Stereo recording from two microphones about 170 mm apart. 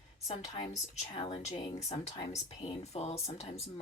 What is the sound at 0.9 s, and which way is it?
Speech, 35° left (ahead or behind).